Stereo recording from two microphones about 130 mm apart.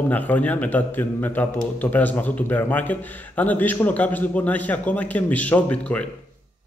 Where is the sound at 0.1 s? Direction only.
15° left (ahead or behind).